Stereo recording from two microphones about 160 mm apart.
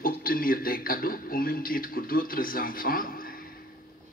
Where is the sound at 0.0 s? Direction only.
65° left (ahead or behind).